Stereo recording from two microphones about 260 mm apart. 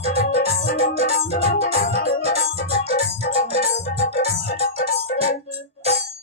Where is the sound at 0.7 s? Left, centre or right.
Left.